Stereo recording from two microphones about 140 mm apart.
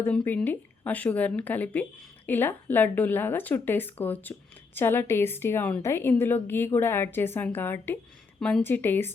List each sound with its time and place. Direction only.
0.0 s a woman's voice: 15° left (ahead or behind)
8.6 s speech: 15° left (ahead or behind)